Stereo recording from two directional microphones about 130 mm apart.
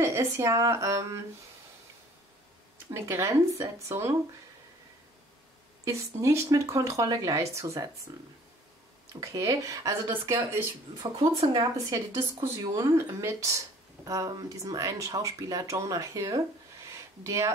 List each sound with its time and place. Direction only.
0.0 s speech: 25° right (ahead or behind)
2.9 s speech: 20° right (ahead or behind)
5.9 s speech: 25° right (ahead or behind)
9.2 s speech: 25° right (ahead or behind)
13.2 s speech: 25° right (ahead or behind)